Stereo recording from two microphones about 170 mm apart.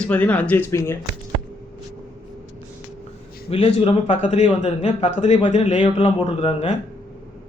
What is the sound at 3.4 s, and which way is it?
A man's voice, 35° left (ahead or behind).